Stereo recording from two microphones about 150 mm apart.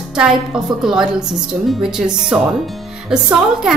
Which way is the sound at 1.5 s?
5° right (ahead or behind).